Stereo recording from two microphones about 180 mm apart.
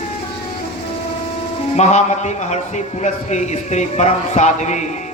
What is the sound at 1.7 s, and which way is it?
A man's voice, 40° left (ahead or behind).